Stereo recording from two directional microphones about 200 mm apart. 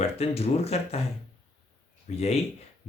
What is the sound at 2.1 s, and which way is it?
Speech, 35° left (ahead or behind).